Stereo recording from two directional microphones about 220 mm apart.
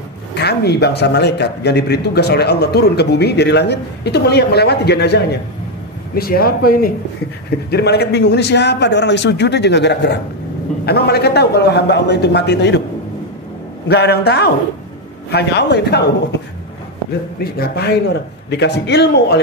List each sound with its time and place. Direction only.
0.3 s a man's voice: 50° left (ahead or behind)
13.8 s a man's voice: 50° left (ahead or behind)
17.4 s a man's voice: 45° left (ahead or behind)